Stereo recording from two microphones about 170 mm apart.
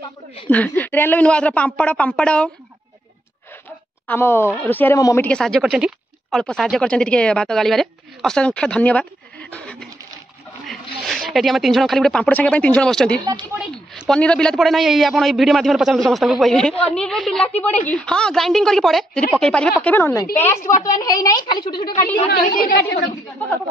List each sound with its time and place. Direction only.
0.5 s a woman's voice: 10° left (ahead or behind)
4.1 s a woman's voice: 15° left (ahead or behind)
13.6 s a sound: 5° right (ahead or behind)
14.1 s a woman's voice: 5° left (ahead or behind); by 21.9 s 25° left (ahead or behind)
22.3 s a woman's voice: 60° left (ahead or behind)